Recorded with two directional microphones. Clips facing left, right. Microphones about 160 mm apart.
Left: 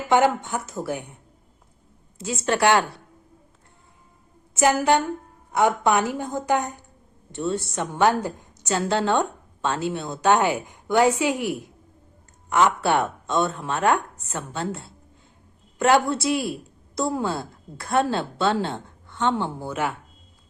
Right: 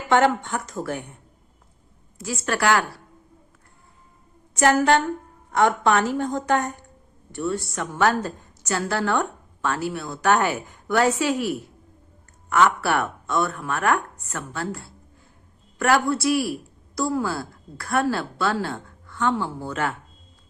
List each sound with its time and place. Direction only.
0.1 s a woman's voice: 10° left (ahead or behind)
2.1 s a woman's voice: 25° left (ahead or behind)
4.5 s a woman's voice: 10° left (ahead or behind)